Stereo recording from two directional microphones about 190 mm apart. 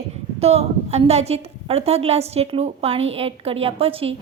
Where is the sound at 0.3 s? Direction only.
35° right (ahead or behind).